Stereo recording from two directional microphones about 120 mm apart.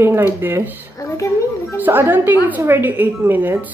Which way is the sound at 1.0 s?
25° left (ahead or behind).